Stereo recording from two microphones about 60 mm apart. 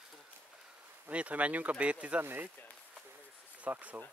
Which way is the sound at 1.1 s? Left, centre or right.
Right.